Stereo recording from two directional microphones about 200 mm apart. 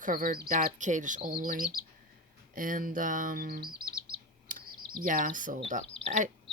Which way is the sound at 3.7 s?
50° right (ahead or behind).